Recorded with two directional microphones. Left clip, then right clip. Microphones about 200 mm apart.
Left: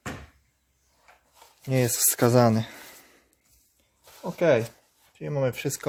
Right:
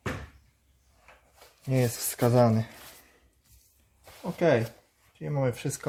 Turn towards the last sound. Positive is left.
turn(degrees=50)  # may be behind; listen again after turning